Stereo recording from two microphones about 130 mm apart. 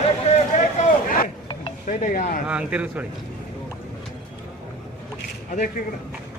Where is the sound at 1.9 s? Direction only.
85° left.